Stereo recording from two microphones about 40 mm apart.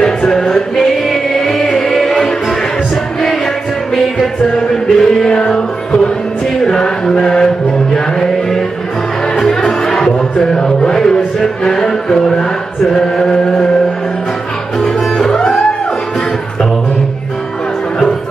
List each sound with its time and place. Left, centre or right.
0.3 s music: centre
4.5 s music: centre
9.4 s music: centre
14.8 s music: centre